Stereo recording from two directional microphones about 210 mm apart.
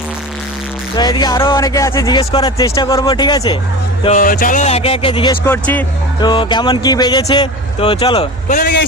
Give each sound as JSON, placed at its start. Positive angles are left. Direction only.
{"t": 0.9, "sound": "speech", "side_deg": 20}
{"t": 4.0, "sound": "speech", "side_deg": 35}
{"t": 5.5, "sound": "speech", "side_deg": 10}
{"t": 6.1, "sound": "speech", "side_deg": 20}
{"t": 8.4, "sound": "a man's voice", "side_deg": 40}